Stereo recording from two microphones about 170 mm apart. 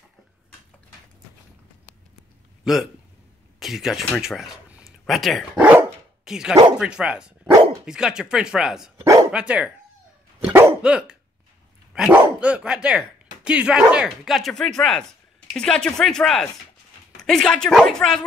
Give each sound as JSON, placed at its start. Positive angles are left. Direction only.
{"t": 2.6, "sound": "speech", "side_deg": 0}
{"t": 9.0, "sound": "dog", "side_deg": -20}
{"t": 9.3, "sound": "speech", "side_deg": -5}
{"t": 10.4, "sound": "dog", "side_deg": -10}
{"t": 11.9, "sound": "speech", "side_deg": -5}